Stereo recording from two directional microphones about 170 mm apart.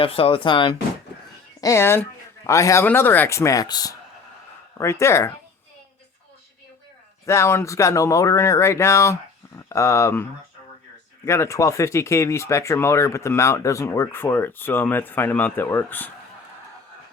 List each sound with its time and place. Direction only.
0.0 s speech: 30° left (ahead or behind)
1.6 s speech: 15° left (ahead or behind)
7.3 s speech: 15° left (ahead or behind)
11.3 s speech: 15° left (ahead or behind)